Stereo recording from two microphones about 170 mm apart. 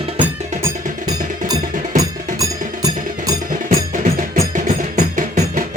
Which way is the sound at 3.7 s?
50° right (ahead or behind).